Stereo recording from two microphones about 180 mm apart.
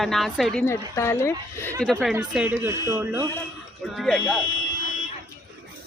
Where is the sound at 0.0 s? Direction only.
Centre (ahead or behind).